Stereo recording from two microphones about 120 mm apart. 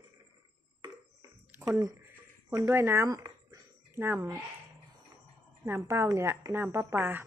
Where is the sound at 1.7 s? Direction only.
25° right (ahead or behind).